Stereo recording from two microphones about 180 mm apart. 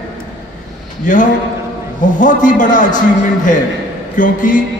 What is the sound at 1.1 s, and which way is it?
A man's voice, 45° left (ahead or behind).